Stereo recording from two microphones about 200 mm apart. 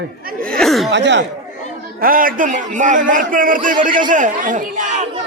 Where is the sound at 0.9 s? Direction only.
60° right (ahead or behind).